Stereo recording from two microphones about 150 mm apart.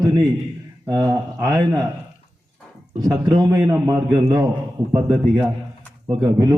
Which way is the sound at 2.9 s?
25° right (ahead or behind).